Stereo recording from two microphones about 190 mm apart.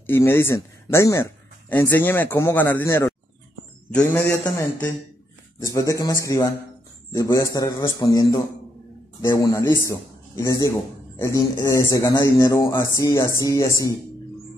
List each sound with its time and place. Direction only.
0.0 s a man's voice: 10° left (ahead or behind)